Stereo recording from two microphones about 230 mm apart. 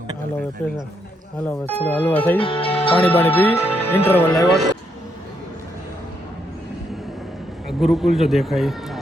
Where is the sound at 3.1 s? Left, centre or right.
Centre.